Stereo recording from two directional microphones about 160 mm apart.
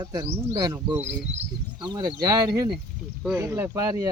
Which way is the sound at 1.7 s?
25° right (ahead or behind).